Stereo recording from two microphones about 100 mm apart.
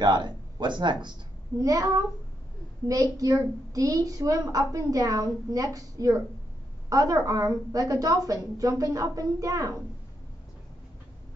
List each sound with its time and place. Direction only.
0.0 s a man's voice: 45° right (ahead or behind)
1.6 s a child's voice: 35° right (ahead or behind)